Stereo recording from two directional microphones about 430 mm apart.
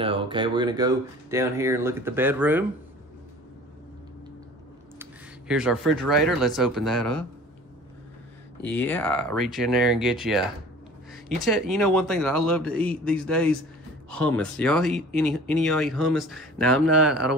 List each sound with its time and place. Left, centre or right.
0.0 s speech: centre
5.5 s speech: centre
8.6 s speech: centre